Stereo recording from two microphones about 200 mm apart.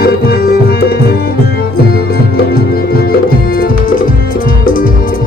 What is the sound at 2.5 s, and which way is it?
Music, 50° left (ahead or behind).